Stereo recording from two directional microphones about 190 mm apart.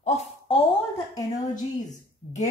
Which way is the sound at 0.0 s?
35° left (ahead or behind).